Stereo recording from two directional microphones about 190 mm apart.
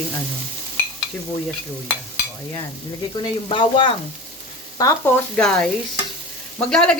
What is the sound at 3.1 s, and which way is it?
Speech, 25° left (ahead or behind).